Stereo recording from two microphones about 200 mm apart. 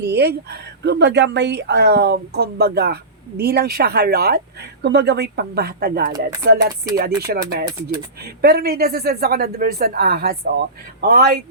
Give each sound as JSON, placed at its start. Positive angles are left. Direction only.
{"t": 0.0, "sound": "speech", "side_deg": -55}